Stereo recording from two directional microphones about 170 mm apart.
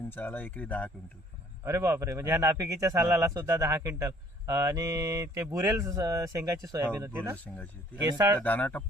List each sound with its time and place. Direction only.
0.1 s speech: 10° left (ahead or behind)
1.6 s speech: 15° right (ahead or behind)
8.4 s speech: 10° left (ahead or behind)